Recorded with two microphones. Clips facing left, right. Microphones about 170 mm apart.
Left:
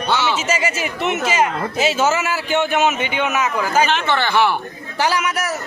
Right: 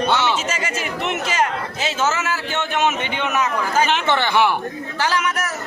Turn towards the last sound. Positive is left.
turn(degrees=10)  # may be behind; listen again after turning